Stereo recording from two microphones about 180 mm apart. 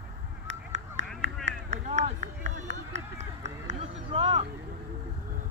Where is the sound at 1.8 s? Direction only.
45° right (ahead or behind).